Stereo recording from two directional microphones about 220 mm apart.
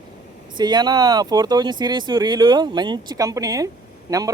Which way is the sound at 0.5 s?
20° right (ahead or behind).